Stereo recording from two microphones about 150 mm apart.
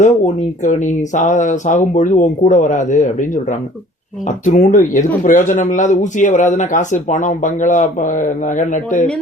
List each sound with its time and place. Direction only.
0.6 s speech: 55° left (ahead or behind)